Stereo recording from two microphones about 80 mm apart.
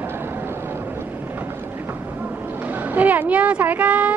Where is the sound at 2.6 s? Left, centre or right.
Right.